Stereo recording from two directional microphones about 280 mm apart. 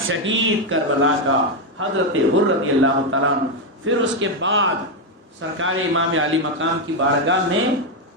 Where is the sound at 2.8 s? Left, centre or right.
Right.